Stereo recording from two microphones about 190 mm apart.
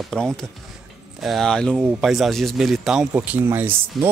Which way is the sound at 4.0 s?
Centre (ahead or behind).